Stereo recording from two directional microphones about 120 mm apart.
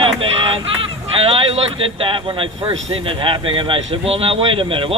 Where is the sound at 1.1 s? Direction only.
50° right (ahead or behind).